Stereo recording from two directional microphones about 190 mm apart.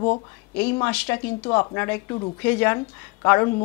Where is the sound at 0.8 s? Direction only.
10° left (ahead or behind).